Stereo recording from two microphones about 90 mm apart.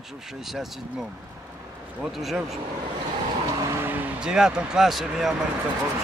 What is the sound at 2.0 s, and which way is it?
Speech, 5° right (ahead or behind).